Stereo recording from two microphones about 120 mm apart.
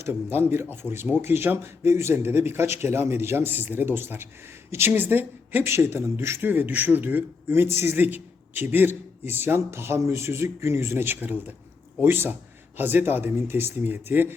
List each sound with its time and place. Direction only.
0.1 s speech: 15° right (ahead or behind)